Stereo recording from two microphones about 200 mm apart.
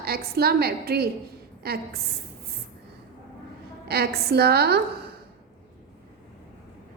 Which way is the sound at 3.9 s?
55° right (ahead or behind).